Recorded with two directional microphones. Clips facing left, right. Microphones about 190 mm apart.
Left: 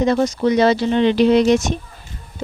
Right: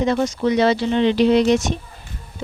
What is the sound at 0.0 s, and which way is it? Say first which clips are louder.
Speech: left 2 dB; 40° left (ahead or behind).